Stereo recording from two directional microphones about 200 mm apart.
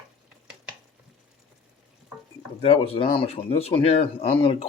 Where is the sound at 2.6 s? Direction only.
30° left (ahead or behind).